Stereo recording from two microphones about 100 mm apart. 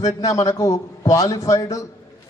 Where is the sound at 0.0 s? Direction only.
35° left (ahead or behind).